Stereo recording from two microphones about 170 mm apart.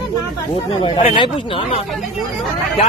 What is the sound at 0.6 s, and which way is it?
Speech, 35° left (ahead or behind).